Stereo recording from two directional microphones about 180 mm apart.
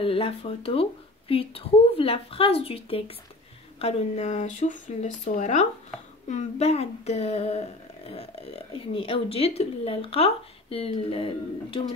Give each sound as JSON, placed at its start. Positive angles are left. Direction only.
{"t": 0.0, "sound": "speech", "side_deg": 30}